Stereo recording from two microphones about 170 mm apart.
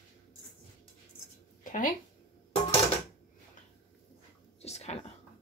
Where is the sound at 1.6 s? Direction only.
50° left (ahead or behind).